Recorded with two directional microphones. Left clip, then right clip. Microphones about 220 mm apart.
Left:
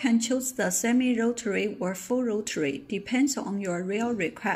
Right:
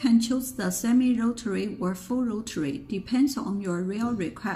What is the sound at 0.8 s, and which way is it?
Speech, 10° left (ahead or behind).